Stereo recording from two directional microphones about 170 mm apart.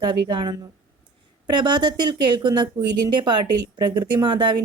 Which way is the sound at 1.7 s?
25° right (ahead or behind).